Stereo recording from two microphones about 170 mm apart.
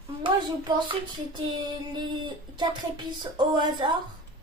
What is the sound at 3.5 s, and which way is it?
Speech, 25° right (ahead or behind).